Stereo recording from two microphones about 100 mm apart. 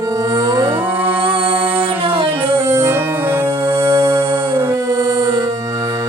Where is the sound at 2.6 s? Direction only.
25° right (ahead or behind).